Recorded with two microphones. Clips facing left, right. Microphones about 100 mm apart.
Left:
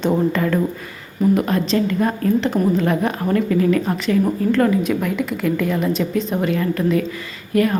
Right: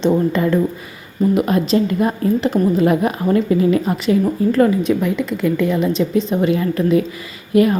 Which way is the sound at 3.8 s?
5° right (ahead or behind).